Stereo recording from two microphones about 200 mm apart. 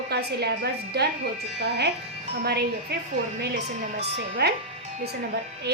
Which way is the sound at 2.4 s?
55° right (ahead or behind).